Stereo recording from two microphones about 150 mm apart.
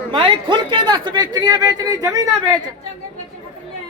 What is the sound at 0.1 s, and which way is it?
A man's voice, 35° right (ahead or behind).